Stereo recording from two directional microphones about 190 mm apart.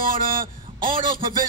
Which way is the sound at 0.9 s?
25° right (ahead or behind).